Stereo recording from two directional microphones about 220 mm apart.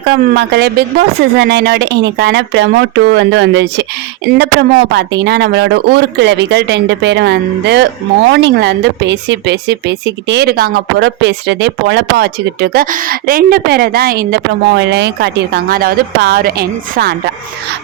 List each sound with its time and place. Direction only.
0.1 s speech: 50° right (ahead or behind)